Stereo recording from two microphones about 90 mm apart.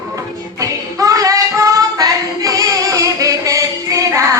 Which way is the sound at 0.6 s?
40° right (ahead or behind).